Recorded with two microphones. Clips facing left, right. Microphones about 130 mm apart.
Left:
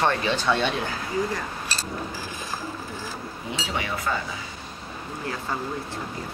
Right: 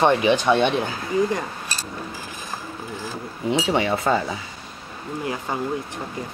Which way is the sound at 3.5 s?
25° right (ahead or behind).